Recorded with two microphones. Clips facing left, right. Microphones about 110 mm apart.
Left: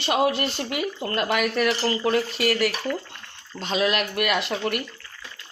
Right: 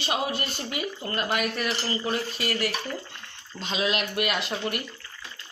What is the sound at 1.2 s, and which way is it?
Speech, 75° left (ahead or behind).